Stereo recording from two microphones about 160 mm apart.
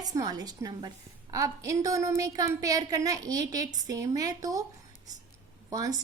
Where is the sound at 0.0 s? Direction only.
25° right (ahead or behind).